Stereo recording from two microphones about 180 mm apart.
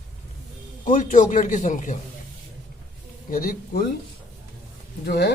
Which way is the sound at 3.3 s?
50° left (ahead or behind).